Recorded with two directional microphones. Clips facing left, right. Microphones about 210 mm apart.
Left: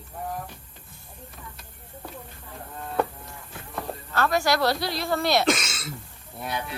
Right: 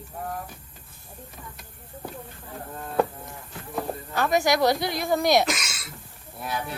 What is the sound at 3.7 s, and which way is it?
Speech, 15° right (ahead or behind).